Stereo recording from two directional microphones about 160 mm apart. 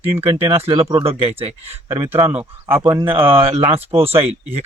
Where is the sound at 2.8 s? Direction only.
25° right (ahead or behind).